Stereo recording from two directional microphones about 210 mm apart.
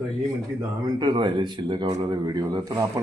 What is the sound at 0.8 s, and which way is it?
A man's voice, 20° right (ahead or behind).